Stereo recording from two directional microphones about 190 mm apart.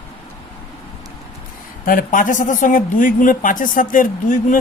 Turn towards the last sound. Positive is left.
turn(degrees=45)  # may be behind; listen again after turning